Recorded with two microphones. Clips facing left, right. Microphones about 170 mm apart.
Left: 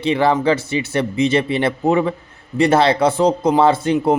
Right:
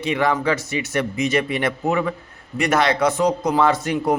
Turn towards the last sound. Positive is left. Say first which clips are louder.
# left 4 dB
turn(degrees=25)  # may be behind; listen again after turning